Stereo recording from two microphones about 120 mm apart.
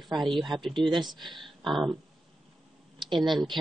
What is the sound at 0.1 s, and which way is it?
Speech, centre (ahead or behind).